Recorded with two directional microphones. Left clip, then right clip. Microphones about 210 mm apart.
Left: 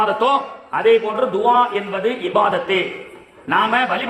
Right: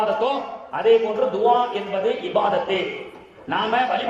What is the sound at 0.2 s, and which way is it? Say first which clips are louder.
Speech: left 6 dB; 45° left (ahead or behind).